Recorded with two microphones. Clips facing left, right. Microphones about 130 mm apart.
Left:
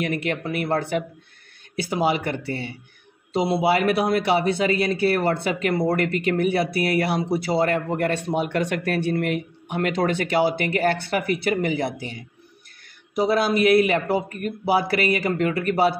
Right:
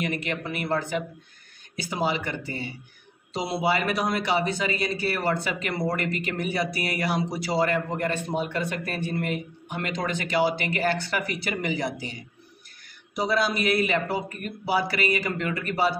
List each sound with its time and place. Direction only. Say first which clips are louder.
0.0 s speech: left 4 dB; 50° left (ahead or behind)
8.4 s speech: left 5 dB; 80° left
9.1 s speech: left 5 dB; 60° left (ahead or behind)
13.2 s speech: left 5 dB; 50° left (ahead or behind)